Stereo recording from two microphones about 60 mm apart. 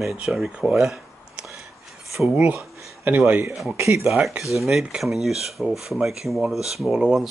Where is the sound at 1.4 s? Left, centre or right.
Centre.